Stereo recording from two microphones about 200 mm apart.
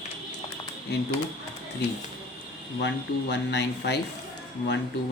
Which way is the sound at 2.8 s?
60° left (ahead or behind).